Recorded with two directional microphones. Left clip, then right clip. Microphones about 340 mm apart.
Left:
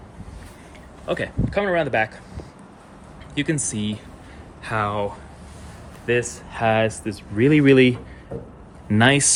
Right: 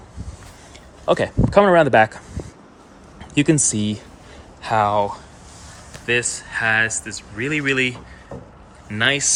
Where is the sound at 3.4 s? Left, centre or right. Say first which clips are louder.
Right 7 dB; centre.